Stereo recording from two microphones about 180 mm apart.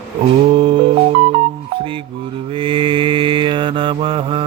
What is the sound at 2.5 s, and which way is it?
Mantra, 30° right (ahead or behind).